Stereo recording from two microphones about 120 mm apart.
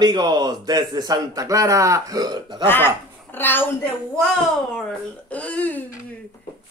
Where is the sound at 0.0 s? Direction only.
35° right (ahead or behind).